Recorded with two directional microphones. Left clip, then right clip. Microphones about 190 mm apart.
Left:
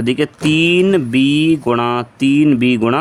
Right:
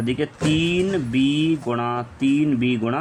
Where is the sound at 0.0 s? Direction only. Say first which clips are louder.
Left 7 dB; 50° left (ahead or behind).